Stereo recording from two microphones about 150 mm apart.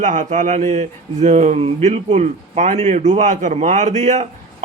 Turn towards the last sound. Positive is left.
turn(degrees=-50)  # may be behind; listen again after turning